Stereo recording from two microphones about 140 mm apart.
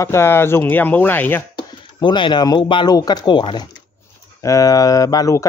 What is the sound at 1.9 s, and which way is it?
Speech, 35° left (ahead or behind).